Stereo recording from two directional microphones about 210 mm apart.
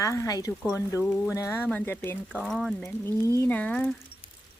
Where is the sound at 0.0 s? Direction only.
15° left (ahead or behind).